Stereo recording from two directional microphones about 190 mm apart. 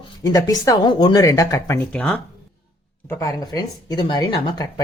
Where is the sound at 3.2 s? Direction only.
20° left (ahead or behind).